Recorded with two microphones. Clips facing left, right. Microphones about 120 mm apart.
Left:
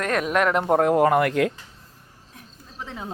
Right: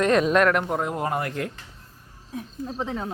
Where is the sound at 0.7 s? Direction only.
60° left (ahead or behind); by 1.5 s 80° left.